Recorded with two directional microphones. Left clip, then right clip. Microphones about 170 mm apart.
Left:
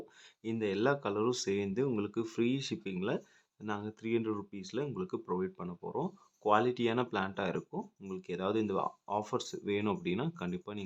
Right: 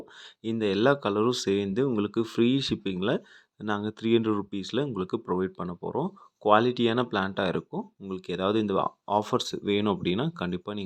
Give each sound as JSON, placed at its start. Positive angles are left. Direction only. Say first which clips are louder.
{"t": 0.6, "sound": "speech", "louder": "right 8 dB", "side_deg": -35}